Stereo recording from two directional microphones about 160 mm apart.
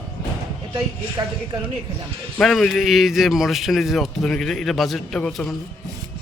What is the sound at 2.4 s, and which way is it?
A man's voice, centre (ahead or behind).